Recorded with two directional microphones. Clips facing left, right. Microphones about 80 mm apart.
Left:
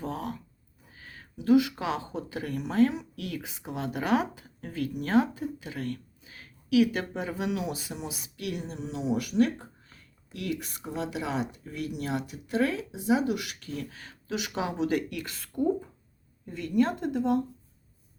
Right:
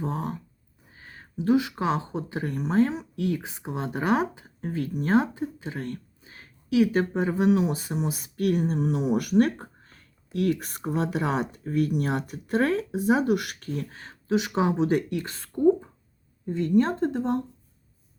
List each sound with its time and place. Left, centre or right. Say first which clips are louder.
0.0 s speech: right 4 dB; right